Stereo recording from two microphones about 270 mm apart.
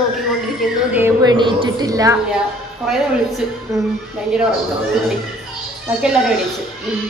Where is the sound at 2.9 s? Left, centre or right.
Centre.